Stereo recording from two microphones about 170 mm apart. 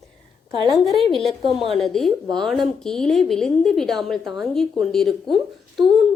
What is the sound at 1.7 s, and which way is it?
A woman's voice, centre (ahead or behind).